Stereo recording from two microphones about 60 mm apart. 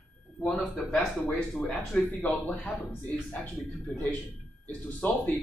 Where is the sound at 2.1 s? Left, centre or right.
Left.